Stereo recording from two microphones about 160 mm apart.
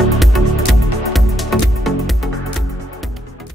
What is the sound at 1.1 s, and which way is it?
Music, centre (ahead or behind).